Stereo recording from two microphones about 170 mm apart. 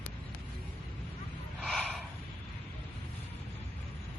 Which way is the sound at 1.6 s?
Centre (ahead or behind).